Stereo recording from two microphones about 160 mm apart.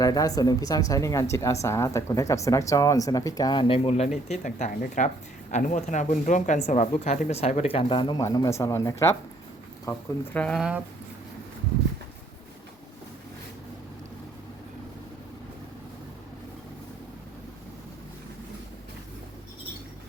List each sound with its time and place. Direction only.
0.0 s speech: 20° left (ahead or behind)
10.3 s speech: 5° left (ahead or behind)